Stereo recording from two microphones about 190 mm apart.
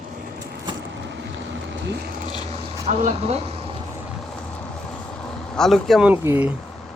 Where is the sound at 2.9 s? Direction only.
35° right (ahead or behind).